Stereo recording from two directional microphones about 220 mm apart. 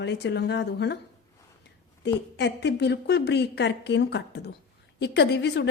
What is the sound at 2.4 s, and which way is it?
A woman's voice, 50° left (ahead or behind).